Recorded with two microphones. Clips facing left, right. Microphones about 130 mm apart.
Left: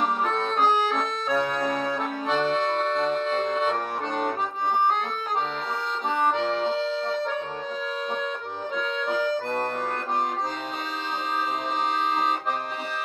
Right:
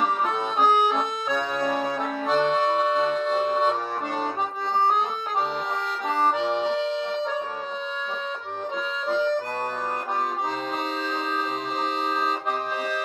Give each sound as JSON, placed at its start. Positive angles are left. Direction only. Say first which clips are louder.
{"t": 0.3, "sound": "accordion", "louder": "right 1 dB", "side_deg": -10}
{"t": 6.3, "sound": "accordion", "louder": "right 1 dB", "side_deg": -10}
{"t": 6.8, "sound": "music", "louder": "even", "side_deg": 35}